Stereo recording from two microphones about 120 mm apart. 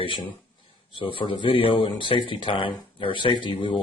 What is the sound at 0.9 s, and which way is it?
A man's voice, 45° left (ahead or behind).